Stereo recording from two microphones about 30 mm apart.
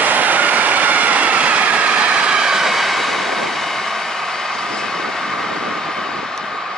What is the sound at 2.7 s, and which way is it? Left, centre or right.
Vehicle, centre.